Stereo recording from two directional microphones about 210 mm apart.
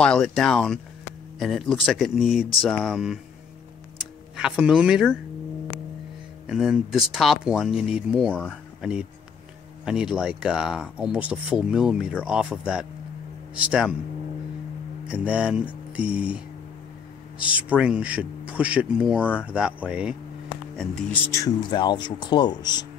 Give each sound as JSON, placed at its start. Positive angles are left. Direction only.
{"t": 0.0, "sound": "speech", "side_deg": 5}
{"t": 4.4, "sound": "speech", "side_deg": -5}
{"t": 6.4, "sound": "speech", "side_deg": -5}
{"t": 15.0, "sound": "speech", "side_deg": -5}
{"t": 21.3, "sound": "speech", "side_deg": 15}